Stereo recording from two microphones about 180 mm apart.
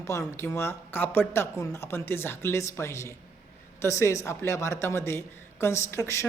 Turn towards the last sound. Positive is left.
turn(degrees=15)  # may be behind; listen again after turning